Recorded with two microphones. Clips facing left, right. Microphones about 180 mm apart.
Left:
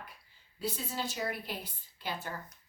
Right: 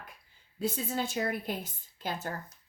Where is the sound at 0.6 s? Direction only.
50° right (ahead or behind).